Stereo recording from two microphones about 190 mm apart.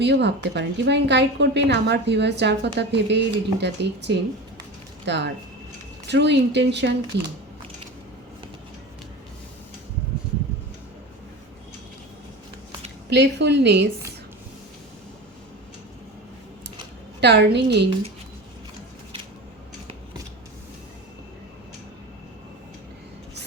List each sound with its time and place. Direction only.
0.0 s a woman's voice: 65° right (ahead or behind)
13.1 s a woman's voice: 65° right (ahead or behind)
17.2 s a woman's voice: 60° right (ahead or behind)